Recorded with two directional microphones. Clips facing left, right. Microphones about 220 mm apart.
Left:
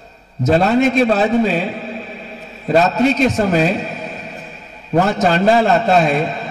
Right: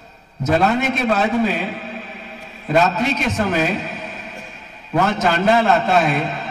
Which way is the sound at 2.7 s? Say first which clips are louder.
Left 4 dB; 40° left (ahead or behind).